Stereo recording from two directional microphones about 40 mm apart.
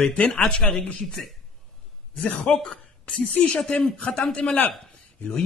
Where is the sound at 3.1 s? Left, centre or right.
Left.